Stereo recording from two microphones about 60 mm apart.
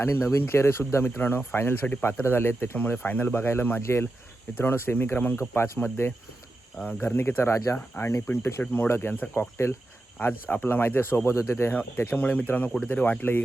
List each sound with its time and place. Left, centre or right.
0.0 s speech: left
2.2 s speech: left
2.7 s speech: left
7.5 s speech: left
10.2 s speech: left
12.1 s speech: left